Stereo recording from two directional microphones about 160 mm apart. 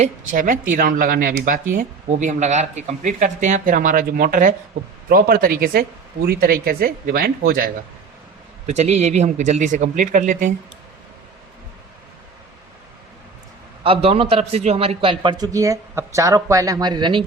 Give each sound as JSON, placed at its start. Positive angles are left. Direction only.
{"t": 0.0, "sound": "speech", "side_deg": -55}
{"t": 8.6, "sound": "speech", "side_deg": -45}
{"t": 13.8, "sound": "a man's voice", "side_deg": -35}